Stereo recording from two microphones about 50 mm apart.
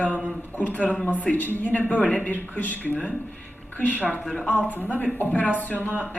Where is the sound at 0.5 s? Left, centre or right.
Left.